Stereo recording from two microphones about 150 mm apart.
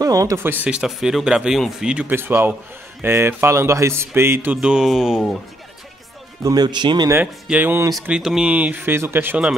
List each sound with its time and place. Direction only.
0.0 s speech: 25° right (ahead or behind); by 5.4 s centre (ahead or behind)
6.4 s speech: 25° right (ahead or behind)
7.4 s speech: 10° right (ahead or behind)
7.9 s speech: 5° right (ahead or behind)